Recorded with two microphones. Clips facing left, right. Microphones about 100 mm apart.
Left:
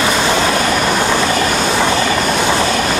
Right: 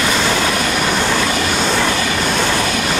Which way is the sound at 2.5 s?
35° left (ahead or behind).